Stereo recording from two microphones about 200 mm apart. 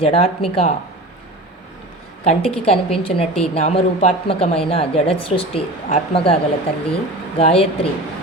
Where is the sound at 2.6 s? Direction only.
30° left (ahead or behind).